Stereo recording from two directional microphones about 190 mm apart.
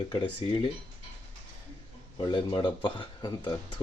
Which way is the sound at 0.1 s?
25° left (ahead or behind).